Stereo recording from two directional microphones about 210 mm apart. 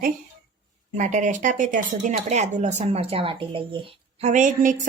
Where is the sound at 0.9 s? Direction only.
35° right (ahead or behind).